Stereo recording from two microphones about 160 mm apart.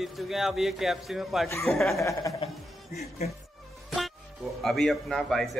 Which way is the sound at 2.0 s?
20° left (ahead or behind).